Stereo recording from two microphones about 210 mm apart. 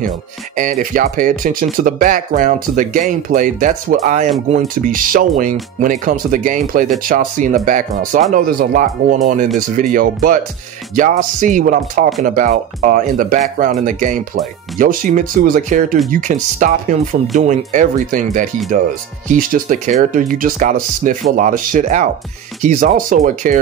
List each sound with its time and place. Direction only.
0.6 s speech: 40° right (ahead or behind)